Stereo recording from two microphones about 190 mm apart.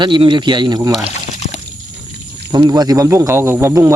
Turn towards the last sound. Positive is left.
turn(degrees=-15)  # may be behind; listen again after turning